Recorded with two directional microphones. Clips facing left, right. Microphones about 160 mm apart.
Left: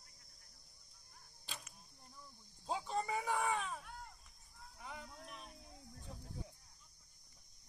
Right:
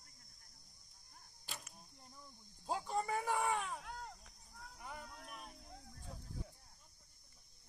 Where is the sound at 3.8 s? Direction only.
90° right.